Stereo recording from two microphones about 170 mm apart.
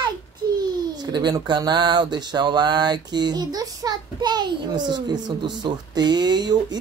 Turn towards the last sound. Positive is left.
turn(degrees=-25)  # may be behind; listen again after turning